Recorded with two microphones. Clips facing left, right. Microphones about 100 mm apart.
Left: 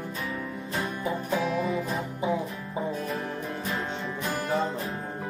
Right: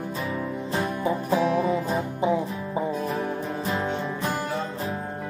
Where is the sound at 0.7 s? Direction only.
30° right (ahead or behind).